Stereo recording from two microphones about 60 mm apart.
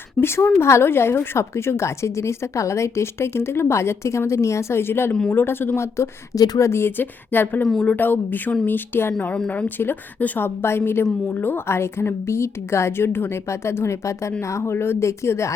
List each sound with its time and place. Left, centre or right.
0.2 s a woman's voice: left
6.3 s speech: left
6.7 s a woman's voice: left